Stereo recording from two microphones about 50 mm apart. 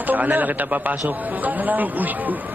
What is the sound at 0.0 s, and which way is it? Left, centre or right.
A man's voice, right.